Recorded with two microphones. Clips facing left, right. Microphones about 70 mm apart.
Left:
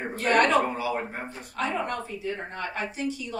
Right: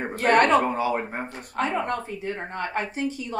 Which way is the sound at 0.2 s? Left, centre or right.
Right.